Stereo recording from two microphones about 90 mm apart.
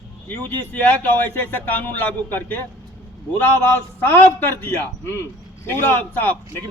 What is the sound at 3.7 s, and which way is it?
A man's voice, 25° left (ahead or behind).